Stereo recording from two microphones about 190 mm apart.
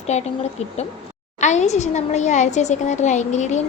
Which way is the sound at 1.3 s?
35° left (ahead or behind).